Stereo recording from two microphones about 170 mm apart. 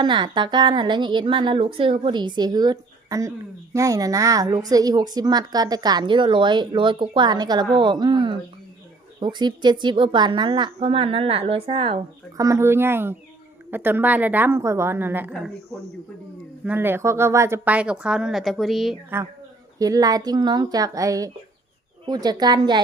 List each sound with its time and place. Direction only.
0.0 s speech: 25° right (ahead or behind)
12.4 s speech: 20° right (ahead or behind)
16.6 s speech: 10° right (ahead or behind)
19.8 s speech: 20° right (ahead or behind)